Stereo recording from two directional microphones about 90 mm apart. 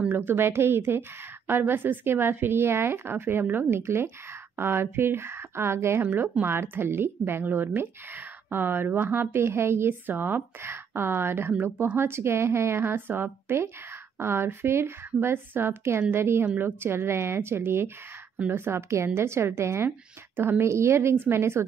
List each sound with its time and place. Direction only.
0.1 s a woman's voice: 25° right (ahead or behind)